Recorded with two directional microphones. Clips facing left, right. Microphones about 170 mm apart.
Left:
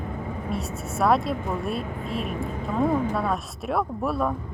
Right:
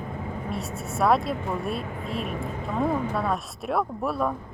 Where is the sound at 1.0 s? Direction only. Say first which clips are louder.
Even; centre (ahead or behind).